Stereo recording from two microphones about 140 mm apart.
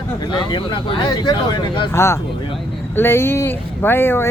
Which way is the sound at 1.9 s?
20° left (ahead or behind).